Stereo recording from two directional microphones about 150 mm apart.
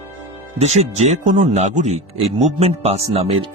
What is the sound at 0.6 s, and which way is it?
Speech, 45° right (ahead or behind).